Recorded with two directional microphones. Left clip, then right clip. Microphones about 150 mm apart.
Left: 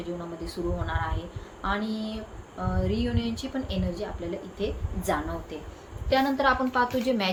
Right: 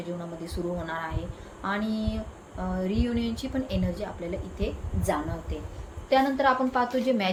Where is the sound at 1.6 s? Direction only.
15° right (ahead or behind).